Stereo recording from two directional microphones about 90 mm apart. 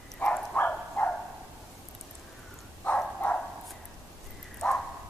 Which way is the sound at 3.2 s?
20° left (ahead or behind).